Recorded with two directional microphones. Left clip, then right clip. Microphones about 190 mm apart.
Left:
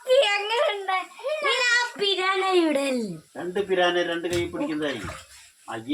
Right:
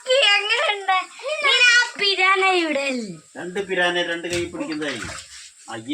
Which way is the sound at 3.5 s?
50° right (ahead or behind).